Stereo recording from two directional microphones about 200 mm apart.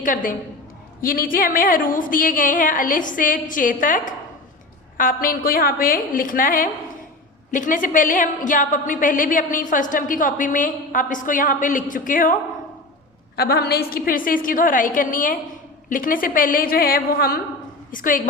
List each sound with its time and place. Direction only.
0.0 s a woman's voice: 45° left (ahead or behind)
13.3 s a woman's voice: 55° left (ahead or behind)